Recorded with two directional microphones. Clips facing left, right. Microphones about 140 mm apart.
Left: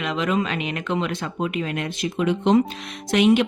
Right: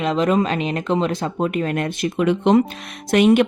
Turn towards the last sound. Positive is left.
turn(degrees=-50)  # may be behind; listen again after turning